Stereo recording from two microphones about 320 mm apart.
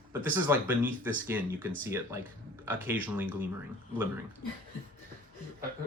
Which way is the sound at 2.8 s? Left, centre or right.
Centre.